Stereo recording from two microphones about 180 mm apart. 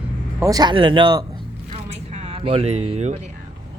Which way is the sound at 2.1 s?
35° right (ahead or behind).